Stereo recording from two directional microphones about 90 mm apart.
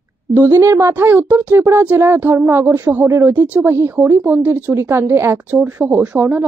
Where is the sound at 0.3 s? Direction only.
25° right (ahead or behind).